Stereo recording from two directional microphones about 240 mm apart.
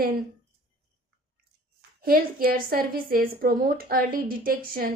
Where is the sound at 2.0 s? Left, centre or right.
Right.